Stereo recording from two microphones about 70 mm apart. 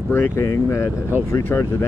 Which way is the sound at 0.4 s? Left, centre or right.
Left.